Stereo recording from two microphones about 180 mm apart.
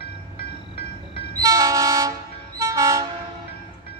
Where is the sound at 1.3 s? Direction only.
20° right (ahead or behind).